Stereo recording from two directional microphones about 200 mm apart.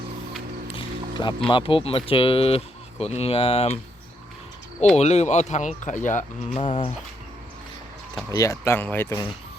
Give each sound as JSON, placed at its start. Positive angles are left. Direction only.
{"t": 0.7, "sound": "a sound", "side_deg": 25}
{"t": 1.5, "sound": "speech", "side_deg": 25}
{"t": 4.9, "sound": "speech", "side_deg": 35}
{"t": 8.3, "sound": "speech", "side_deg": 15}